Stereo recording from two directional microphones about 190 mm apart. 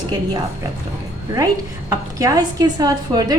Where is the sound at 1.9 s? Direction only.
20° right (ahead or behind).